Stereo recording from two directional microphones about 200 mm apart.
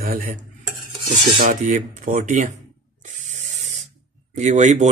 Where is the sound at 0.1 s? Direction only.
45° right (ahead or behind).